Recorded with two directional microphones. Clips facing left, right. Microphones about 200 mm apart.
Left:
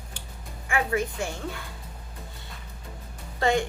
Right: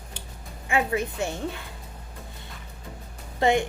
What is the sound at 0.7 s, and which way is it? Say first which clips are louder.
Speech: right 1 dB; 20° right (ahead or behind).